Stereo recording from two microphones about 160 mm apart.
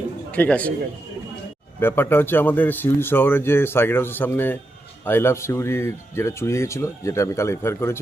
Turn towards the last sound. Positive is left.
turn(degrees=15)  # may be behind; listen again after turning